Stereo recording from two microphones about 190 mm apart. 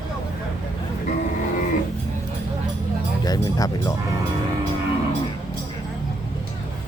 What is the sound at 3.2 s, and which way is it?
Speech, 20° left (ahead or behind).